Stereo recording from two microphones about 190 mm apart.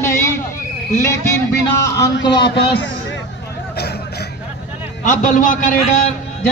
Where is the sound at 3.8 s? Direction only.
55° left (ahead or behind).